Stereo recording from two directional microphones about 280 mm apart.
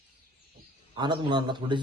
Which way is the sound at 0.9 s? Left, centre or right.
Centre.